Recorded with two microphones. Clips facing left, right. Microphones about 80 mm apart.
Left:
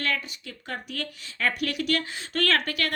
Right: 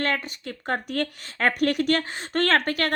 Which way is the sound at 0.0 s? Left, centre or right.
Right.